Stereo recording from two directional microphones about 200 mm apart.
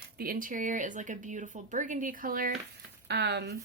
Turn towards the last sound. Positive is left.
turn(degrees=-55)  # may be behind; listen again after turning